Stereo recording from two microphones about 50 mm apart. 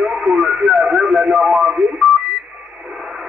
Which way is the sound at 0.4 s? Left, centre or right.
Centre.